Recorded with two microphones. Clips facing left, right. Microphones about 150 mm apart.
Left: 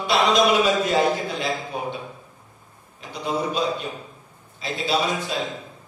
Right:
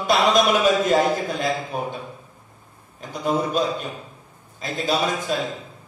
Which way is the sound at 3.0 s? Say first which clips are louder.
Right 3 dB; 45° right (ahead or behind).